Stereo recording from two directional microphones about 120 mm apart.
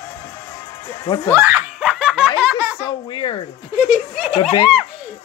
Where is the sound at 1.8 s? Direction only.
Centre (ahead or behind).